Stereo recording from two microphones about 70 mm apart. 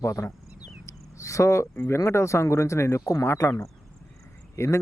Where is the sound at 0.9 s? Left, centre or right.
Left.